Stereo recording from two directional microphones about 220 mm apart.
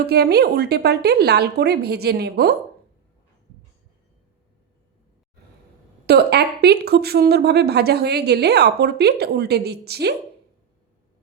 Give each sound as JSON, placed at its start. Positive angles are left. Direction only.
{"t": 0.0, "sound": "speech", "side_deg": -45}
{"t": 6.1, "sound": "speech", "side_deg": -45}